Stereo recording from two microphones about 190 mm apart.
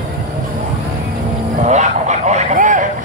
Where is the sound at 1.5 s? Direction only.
40° right (ahead or behind).